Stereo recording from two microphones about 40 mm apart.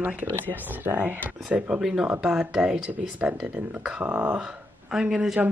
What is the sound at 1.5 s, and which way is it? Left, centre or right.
Speech, right.